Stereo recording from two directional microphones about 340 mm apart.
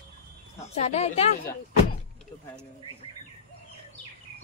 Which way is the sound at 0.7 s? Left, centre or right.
Centre.